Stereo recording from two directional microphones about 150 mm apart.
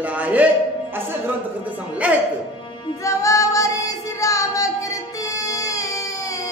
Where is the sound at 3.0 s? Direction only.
20° left (ahead or behind).